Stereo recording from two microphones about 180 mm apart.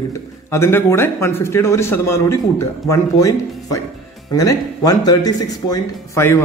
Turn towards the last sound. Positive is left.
turn(degrees=15)  # may be behind; listen again after turning